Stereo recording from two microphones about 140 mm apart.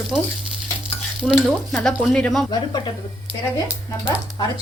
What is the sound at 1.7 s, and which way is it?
Speech, 5° left (ahead or behind).